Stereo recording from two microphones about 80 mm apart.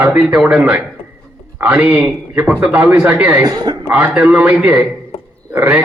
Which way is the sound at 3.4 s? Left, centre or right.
Right.